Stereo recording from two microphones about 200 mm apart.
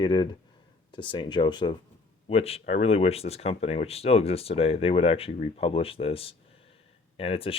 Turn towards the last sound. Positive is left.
turn(degrees=30)  # may be behind; listen again after turning